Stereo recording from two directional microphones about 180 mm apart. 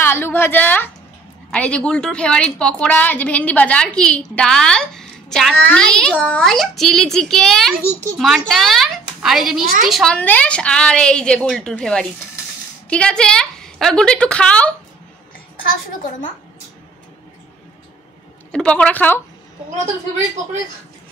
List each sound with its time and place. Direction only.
0.0 s a woman's voice: 10° left (ahead or behind)
9.6 s a woman's voice: 50° right (ahead or behind)
9.8 s a woman's voice: centre (ahead or behind)
15.9 s a woman's voice: 45° left (ahead or behind)
18.5 s a woman's voice: 5° left (ahead or behind)